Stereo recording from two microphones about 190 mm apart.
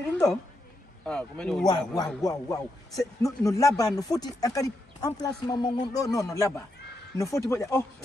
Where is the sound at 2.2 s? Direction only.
20° left (ahead or behind).